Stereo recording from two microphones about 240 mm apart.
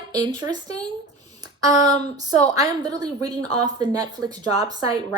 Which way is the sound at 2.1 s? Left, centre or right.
Centre.